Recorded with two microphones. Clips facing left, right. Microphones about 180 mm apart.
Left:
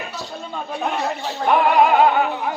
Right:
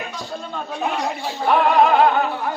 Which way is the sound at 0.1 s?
5° left (ahead or behind).